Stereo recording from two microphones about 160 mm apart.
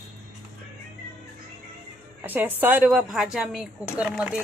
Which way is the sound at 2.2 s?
10° right (ahead or behind).